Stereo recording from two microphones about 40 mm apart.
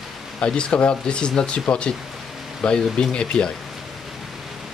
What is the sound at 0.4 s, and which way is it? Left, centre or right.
Speech, left.